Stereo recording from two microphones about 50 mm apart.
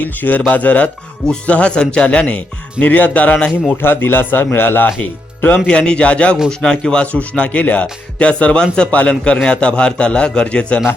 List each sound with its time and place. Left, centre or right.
0.0 s a man's voice: left
2.7 s speech: left
3.3 s a man's voice: centre
3.8 s speech: left
5.6 s a man's voice: centre
6.5 s speech: centre
7.0 s a man's voice: left